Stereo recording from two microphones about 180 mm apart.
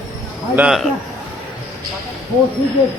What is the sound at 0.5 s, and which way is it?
Speech, 5° right (ahead or behind).